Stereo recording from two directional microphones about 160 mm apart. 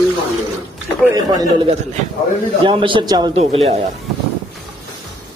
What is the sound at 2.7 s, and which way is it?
Speech, 30° right (ahead or behind).